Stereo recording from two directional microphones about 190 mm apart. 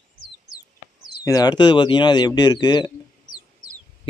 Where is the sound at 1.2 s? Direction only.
20° left (ahead or behind).